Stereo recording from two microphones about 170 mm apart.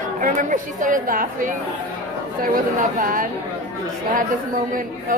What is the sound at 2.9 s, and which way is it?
Speech, 55° right (ahead or behind).